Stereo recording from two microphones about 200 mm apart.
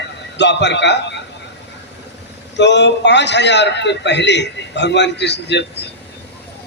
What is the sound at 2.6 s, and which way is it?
A man's voice, 60° left (ahead or behind).